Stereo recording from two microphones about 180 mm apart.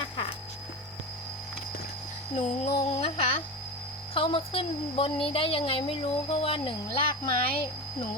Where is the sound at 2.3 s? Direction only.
40° left (ahead or behind).